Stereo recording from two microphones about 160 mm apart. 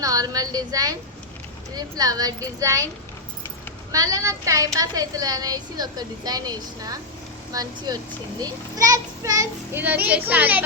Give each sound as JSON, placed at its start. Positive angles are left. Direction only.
{"t": 0.0, "sound": "speech", "side_deg": -20}
{"t": 3.9, "sound": "a child's voice", "side_deg": -20}